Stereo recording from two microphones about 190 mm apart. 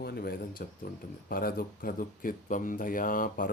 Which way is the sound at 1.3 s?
50° left (ahead or behind).